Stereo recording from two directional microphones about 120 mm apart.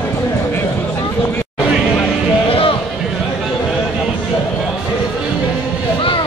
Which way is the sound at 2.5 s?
50° left (ahead or behind).